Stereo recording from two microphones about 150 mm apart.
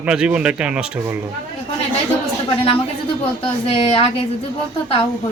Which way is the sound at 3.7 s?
40° left (ahead or behind).